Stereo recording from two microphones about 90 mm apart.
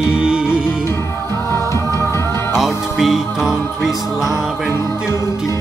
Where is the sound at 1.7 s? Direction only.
30° left (ahead or behind).